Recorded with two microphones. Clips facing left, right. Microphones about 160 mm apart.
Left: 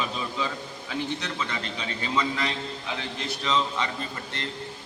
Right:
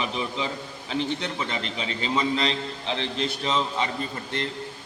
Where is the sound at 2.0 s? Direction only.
25° right (ahead or behind).